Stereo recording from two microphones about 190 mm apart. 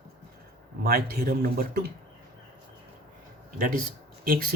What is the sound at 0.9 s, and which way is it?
Speech, 55° right (ahead or behind).